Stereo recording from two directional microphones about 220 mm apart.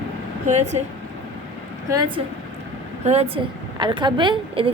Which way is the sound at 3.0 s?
30° right (ahead or behind).